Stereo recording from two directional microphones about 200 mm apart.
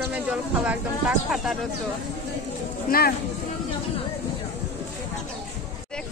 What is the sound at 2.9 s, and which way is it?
Speech, 50° left (ahead or behind).